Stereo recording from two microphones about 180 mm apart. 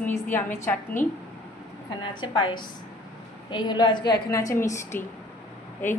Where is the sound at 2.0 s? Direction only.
25° left (ahead or behind).